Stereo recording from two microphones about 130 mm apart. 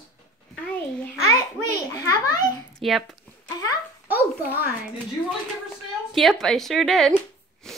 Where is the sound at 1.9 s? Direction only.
25° left (ahead or behind).